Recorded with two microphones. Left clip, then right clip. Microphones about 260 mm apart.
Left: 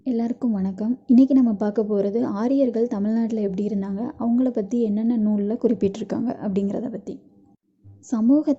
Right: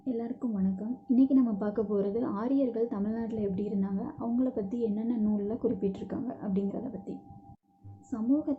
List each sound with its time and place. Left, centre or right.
0.0 s a woman's voice: left